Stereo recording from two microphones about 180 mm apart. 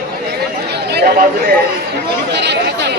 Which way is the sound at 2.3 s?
70° right (ahead or behind).